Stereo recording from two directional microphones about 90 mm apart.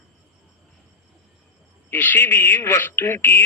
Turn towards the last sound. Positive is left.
turn(degrees=25)  # may be behind; listen again after turning